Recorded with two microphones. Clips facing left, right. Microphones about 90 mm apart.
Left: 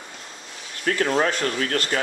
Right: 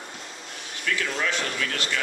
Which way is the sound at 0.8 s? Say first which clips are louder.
Left 6 dB; 45° left (ahead or behind).